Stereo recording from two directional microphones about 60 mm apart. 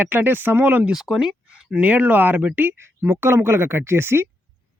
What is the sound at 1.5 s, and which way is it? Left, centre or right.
Speech, right.